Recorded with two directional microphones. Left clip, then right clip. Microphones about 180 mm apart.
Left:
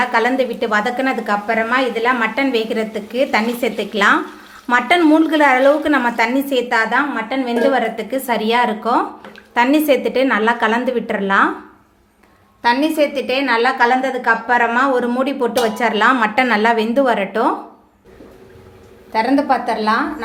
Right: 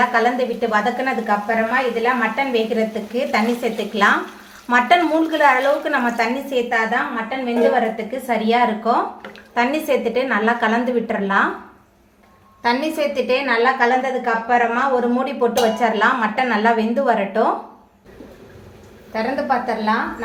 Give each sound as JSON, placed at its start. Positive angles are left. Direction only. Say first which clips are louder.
{"t": 0.1, "sound": "a woman's voice", "louder": "left 2 dB", "side_deg": 40}
{"t": 12.6, "sound": "a woman's voice", "louder": "left 4 dB", "side_deg": 30}
{"t": 19.1, "sound": "a woman's voice", "louder": "left 4 dB", "side_deg": 60}